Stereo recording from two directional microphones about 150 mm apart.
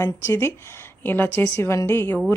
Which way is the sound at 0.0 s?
15° left (ahead or behind).